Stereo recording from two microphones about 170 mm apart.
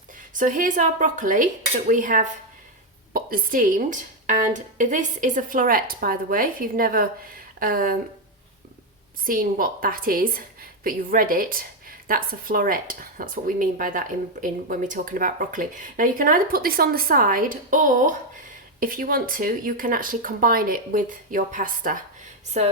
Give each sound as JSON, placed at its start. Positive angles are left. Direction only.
{"t": 0.3, "sound": "a woman's voice", "side_deg": -50}
{"t": 9.2, "sound": "a woman's voice", "side_deg": -55}